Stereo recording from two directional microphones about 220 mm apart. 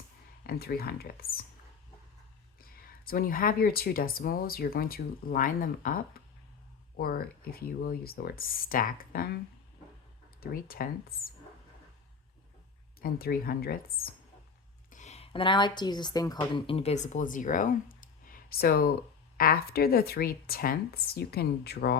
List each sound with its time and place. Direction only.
0.4 s a woman's voice: 45° left (ahead or behind)
2.6 s a woman's voice: 40° left (ahead or behind)
10.4 s speech: 40° left (ahead or behind)
13.0 s a woman's voice: 40° left (ahead or behind)